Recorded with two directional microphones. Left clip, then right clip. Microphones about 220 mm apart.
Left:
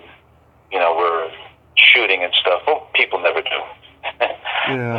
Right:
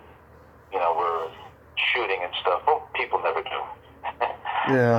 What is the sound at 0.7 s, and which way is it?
Radio, 25° left (ahead or behind).